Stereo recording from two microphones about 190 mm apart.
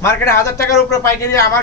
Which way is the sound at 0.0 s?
15° left (ahead or behind).